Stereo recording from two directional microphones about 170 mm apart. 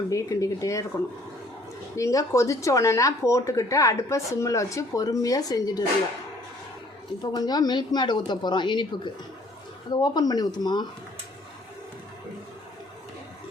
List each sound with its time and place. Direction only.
0.1 s speech: 20° left (ahead or behind)
2.0 s speech: 20° left (ahead or behind)
7.2 s speech: 25° left (ahead or behind)
9.9 s speech: 25° left (ahead or behind)